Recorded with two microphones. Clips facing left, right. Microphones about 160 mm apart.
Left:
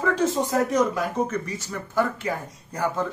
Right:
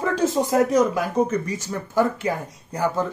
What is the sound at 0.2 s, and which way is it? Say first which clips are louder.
Speech: right 3 dB; 10° right (ahead or behind).